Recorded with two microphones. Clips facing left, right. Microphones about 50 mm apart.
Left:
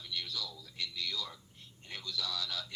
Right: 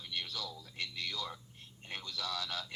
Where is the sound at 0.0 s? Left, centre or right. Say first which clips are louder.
Even; right.